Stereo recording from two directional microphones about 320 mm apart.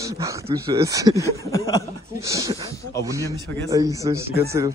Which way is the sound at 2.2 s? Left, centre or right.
Centre.